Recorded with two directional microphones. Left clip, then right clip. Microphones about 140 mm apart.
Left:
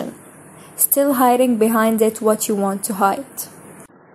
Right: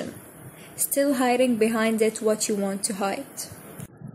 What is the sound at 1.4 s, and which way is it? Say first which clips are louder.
Speech: left 6 dB; 15° left (ahead or behind).